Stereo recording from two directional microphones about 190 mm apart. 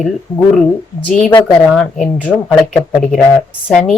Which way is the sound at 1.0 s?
5° left (ahead or behind).